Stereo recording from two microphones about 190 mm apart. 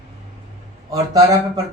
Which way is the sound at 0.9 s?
15° right (ahead or behind).